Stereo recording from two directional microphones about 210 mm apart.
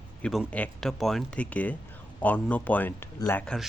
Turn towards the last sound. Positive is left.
turn(degrees=5)  # may be behind; listen again after turning